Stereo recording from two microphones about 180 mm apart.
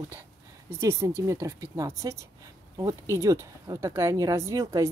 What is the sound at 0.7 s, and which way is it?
Speech, 15° right (ahead or behind).